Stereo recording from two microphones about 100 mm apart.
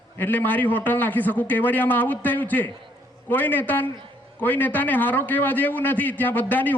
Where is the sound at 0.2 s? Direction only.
20° left (ahead or behind).